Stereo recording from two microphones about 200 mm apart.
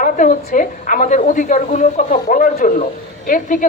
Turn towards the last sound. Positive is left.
turn(degrees=45)  # may be behind; listen again after turning